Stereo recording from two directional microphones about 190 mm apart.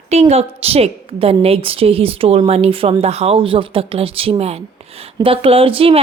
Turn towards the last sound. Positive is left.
turn(degrees=-30)  # may be behind; listen again after turning